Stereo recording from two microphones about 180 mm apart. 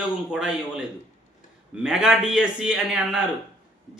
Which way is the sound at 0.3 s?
5° right (ahead or behind).